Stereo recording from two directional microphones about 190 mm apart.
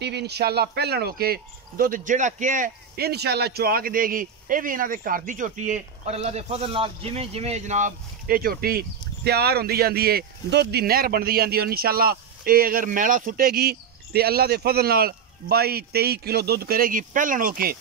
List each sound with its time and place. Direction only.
0.0 s speech: 60° right (ahead or behind)